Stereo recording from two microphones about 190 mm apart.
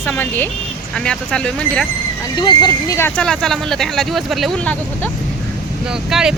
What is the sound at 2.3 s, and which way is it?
Speech, 25° left (ahead or behind).